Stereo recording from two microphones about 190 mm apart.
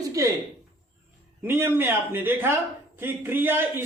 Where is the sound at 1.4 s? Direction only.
10° right (ahead or behind).